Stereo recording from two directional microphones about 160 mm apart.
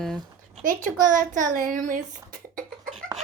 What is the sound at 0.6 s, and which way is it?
Speech, 55° right (ahead or behind).